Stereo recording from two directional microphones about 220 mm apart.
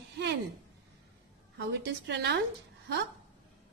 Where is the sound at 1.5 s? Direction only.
50° right (ahead or behind).